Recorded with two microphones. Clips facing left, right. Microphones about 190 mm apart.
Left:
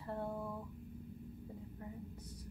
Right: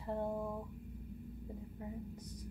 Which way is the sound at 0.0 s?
15° right (ahead or behind).